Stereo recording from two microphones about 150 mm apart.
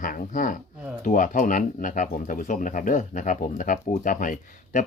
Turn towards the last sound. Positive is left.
turn(degrees=60)  # may be behind; listen again after turning